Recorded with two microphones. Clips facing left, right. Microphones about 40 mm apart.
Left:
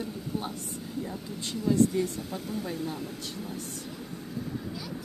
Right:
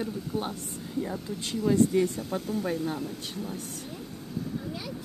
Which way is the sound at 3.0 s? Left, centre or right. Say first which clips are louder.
Right 2 dB; centre.